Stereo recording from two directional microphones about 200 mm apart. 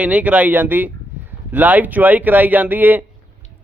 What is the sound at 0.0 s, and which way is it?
Speech, 5° right (ahead or behind).